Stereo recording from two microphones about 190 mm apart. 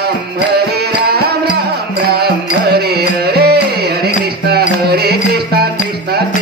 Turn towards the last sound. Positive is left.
turn(degrees=-55)  # may be behind; listen again after turning